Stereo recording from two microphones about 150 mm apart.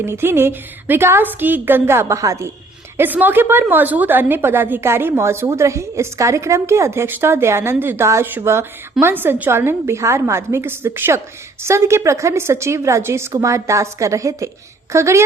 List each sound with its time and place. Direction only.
0.0 s a woman's voice: 15° right (ahead or behind)